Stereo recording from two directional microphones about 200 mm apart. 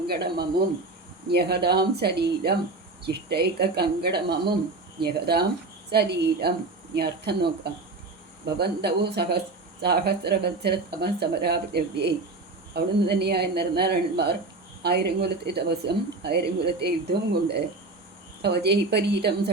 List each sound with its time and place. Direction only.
0.1 s speech: 55° right (ahead or behind)